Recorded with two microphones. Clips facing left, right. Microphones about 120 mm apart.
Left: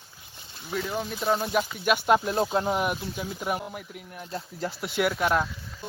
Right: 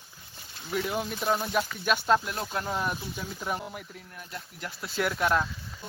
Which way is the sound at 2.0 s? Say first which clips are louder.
Left 5 dB; 20° left (ahead or behind).